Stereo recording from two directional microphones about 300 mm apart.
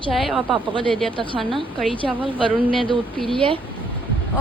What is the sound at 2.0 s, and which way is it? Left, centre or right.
Speech, centre.